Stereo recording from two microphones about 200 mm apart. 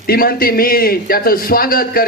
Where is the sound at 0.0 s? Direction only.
50° left (ahead or behind).